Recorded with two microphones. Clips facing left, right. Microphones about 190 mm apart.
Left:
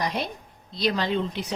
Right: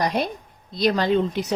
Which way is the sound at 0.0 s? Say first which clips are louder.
Right 5 dB; 45° right (ahead or behind).